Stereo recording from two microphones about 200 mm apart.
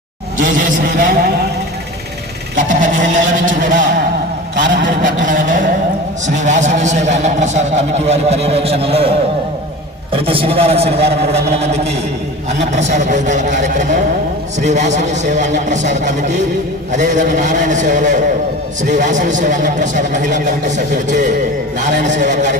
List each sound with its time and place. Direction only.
0.3 s a man's voice: 40° right (ahead or behind)
2.6 s a man's voice: 40° right (ahead or behind)
4.6 s a sound: 65° right (ahead or behind)
5.0 s a man's voice: 40° right (ahead or behind)